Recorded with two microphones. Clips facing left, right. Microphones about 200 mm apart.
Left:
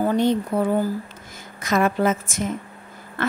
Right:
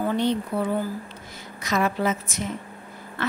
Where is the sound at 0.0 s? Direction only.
45° left (ahead or behind).